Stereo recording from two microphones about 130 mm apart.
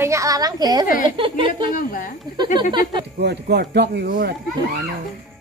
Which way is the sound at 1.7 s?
90° left.